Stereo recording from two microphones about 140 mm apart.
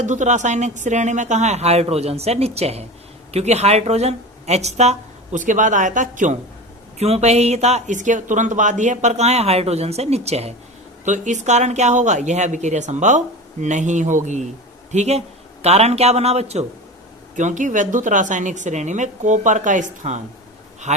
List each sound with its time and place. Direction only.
0.0 s speech: 60° right (ahead or behind)
7.0 s speech: 50° right (ahead or behind)
17.3 s speech: 60° right (ahead or behind)